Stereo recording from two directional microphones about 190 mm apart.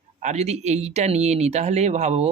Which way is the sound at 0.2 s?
35° right (ahead or behind).